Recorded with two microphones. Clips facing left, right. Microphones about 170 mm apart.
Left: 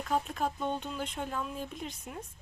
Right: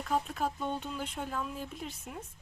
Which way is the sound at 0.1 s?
5° right (ahead or behind).